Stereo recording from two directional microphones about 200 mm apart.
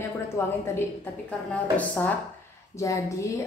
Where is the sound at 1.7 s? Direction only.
5° left (ahead or behind).